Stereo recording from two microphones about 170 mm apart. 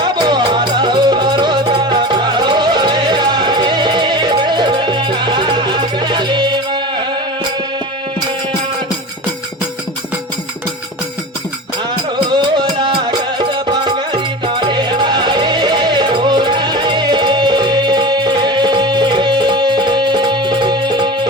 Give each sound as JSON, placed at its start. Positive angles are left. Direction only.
{"t": 0.0, "sound": "music", "side_deg": -25}
{"t": 12.4, "sound": "music", "side_deg": -25}